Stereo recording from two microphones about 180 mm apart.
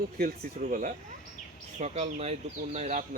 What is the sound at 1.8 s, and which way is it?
Speech, 35° right (ahead or behind).